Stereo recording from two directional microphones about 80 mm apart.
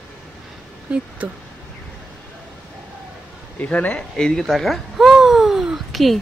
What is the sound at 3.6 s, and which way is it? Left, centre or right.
Speech, centre.